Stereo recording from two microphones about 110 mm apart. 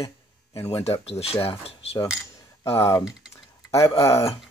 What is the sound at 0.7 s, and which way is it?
Speech, 70° left (ahead or behind).